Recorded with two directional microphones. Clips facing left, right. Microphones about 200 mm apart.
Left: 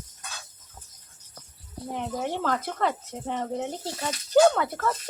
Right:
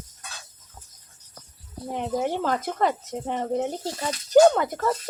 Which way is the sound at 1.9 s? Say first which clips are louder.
Right 4 dB; 15° right (ahead or behind).